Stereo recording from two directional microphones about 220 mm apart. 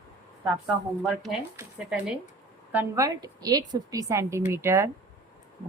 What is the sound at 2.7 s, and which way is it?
A woman's voice, 10° right (ahead or behind).